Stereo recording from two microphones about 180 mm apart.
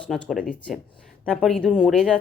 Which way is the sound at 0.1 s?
Centre (ahead or behind).